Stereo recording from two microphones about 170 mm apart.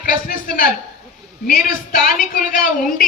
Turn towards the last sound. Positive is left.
turn(degrees=55)  # may be behind; listen again after turning